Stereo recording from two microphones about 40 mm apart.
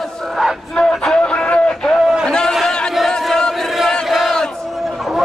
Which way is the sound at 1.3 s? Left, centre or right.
Left.